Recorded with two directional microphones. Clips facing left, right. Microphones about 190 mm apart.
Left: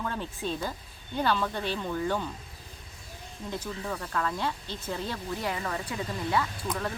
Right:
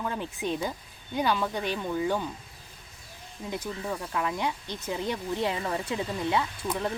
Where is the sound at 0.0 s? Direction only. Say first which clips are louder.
Right 2 dB; 15° right (ahead or behind).